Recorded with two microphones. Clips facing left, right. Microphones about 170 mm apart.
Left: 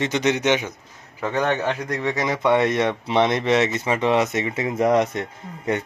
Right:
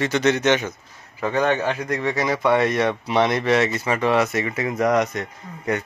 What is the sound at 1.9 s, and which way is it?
Speech, 20° left (ahead or behind).